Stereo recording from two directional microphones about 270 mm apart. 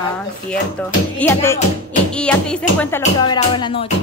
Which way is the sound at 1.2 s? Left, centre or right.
Centre.